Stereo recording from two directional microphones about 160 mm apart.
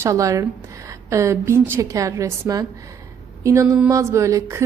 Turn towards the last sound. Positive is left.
turn(degrees=-20)  # may be behind; listen again after turning